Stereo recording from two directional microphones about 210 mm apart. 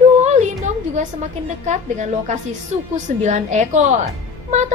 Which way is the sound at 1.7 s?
35° right (ahead or behind).